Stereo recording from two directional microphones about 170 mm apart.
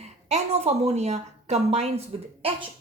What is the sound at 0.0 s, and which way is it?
Speech, 40° right (ahead or behind).